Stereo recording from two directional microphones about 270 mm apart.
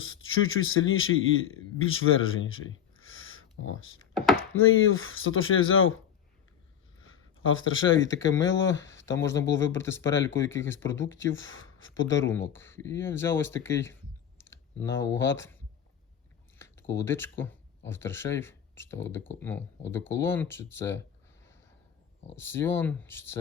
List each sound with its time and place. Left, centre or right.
0.0 s a man's voice: left
7.0 s a sound: left
8.4 s speech: left
8.6 s speech: centre
11.3 s speech: left
12.3 s speech: centre
16.6 s speech: centre
22.4 s speech: centre